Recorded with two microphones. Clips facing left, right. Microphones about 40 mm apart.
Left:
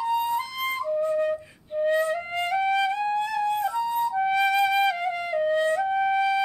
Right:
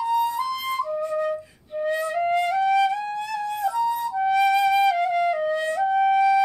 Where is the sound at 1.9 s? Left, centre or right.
Left.